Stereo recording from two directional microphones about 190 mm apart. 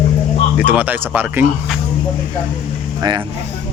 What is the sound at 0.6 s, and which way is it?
Speech, 10° right (ahead or behind).